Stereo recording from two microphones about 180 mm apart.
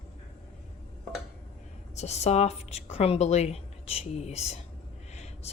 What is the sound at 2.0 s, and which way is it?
A woman's voice, 35° left (ahead or behind).